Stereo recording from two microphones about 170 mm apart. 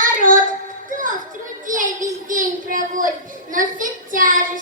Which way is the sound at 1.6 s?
50° right (ahead or behind).